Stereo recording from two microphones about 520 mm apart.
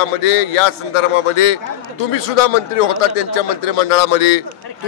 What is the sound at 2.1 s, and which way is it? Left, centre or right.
Speech, left.